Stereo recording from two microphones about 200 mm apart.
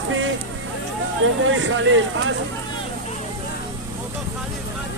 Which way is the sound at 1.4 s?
75° right (ahead or behind).